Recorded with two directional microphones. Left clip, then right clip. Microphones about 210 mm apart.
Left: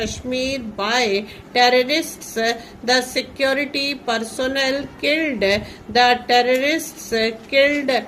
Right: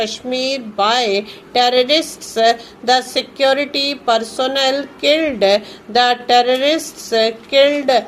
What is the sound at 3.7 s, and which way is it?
Speech, 55° right (ahead or behind).